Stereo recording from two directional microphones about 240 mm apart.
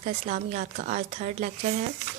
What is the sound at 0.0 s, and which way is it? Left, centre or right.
A woman's voice, right.